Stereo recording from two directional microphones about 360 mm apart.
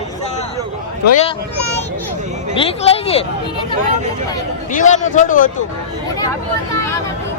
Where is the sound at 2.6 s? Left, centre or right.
Centre.